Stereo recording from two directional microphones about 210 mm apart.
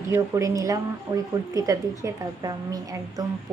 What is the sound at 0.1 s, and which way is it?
A woman's voice, 15° right (ahead or behind).